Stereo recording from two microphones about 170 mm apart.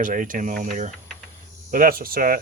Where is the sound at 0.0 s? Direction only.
50° right (ahead or behind).